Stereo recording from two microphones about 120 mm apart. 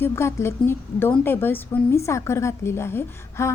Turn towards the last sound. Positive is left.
turn(degrees=20)  # may be behind; listen again after turning